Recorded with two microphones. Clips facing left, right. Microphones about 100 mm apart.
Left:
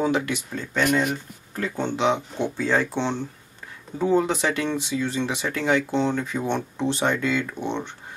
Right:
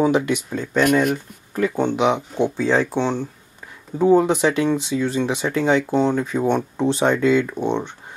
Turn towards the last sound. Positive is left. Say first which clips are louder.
# right 6 dB
turn(degrees=-15)  # may be behind; listen again after turning